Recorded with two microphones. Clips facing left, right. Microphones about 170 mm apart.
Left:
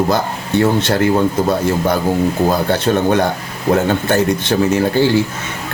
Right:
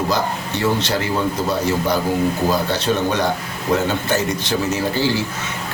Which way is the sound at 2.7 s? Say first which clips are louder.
Left 5 dB; 55° left (ahead or behind).